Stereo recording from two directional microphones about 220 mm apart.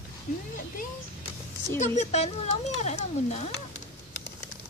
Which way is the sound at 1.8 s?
30° left (ahead or behind).